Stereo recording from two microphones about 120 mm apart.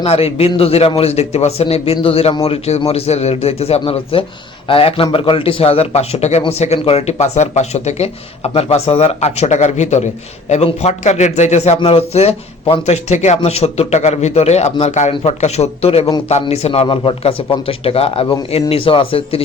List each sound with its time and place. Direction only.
0.0 s a man's voice: 55° left (ahead or behind); by 10.0 s 80° left
10.5 s a man's voice: 65° left (ahead or behind)
11.9 s a man's voice: 55° left (ahead or behind)
15.1 s a man's voice: 60° left (ahead or behind)